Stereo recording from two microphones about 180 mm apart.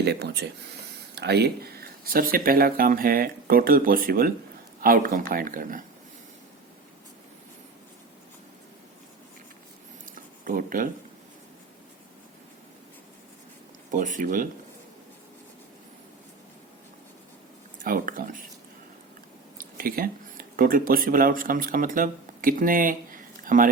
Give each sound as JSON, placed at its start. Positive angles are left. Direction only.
{"t": 0.0, "sound": "speech", "side_deg": -65}
{"t": 10.2, "sound": "a sound", "side_deg": -50}
{"t": 13.9, "sound": "speech", "side_deg": -45}
{"t": 17.8, "sound": "speech", "side_deg": -50}
{"t": 19.5, "sound": "speech", "side_deg": -50}